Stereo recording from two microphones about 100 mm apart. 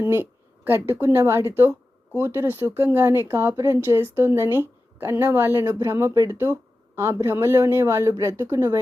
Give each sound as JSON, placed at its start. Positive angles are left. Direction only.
{"t": 0.0, "sound": "speech", "side_deg": -25}